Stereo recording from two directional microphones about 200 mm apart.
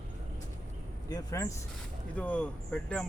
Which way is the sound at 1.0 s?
20° left (ahead or behind).